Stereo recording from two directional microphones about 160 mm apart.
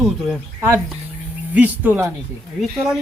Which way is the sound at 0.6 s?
15° right (ahead or behind).